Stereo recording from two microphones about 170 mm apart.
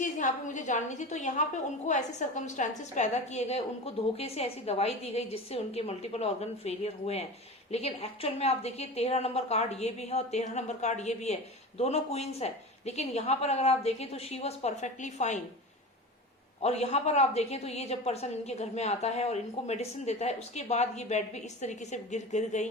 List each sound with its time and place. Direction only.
0.0 s a woman's voice: 45° left (ahead or behind)
16.6 s a woman's voice: 40° left (ahead or behind)